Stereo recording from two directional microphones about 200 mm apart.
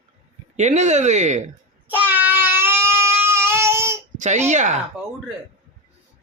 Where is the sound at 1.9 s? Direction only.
10° right (ahead or behind).